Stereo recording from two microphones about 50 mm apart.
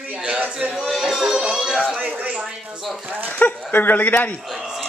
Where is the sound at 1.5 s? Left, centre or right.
Centre.